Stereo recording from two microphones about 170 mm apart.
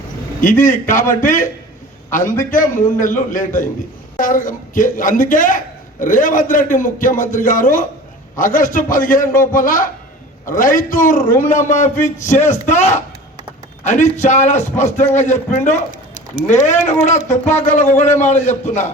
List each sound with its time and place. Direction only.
0.4 s a man's voice: 50° left (ahead or behind)
17.2 s a man's voice: 45° left (ahead or behind)